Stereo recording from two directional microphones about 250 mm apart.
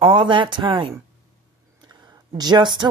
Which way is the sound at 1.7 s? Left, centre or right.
Centre.